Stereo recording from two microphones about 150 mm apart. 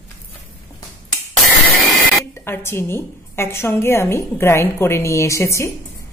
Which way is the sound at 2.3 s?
15° left (ahead or behind).